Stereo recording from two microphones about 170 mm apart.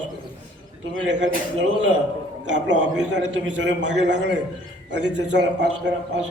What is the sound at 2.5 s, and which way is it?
A man's voice, 90° right.